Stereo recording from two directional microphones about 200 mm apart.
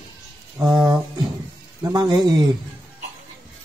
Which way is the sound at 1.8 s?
20° right (ahead or behind).